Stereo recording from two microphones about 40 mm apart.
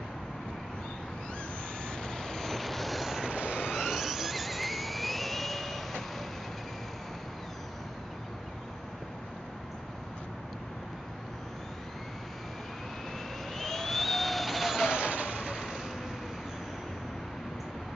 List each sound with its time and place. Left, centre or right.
2.0 s vehicle: centre
3.3 s train: right
3.7 s vehicle: centre
13.6 s vehicle: centre
15.0 s vehicle: right
15.4 s a sound: centre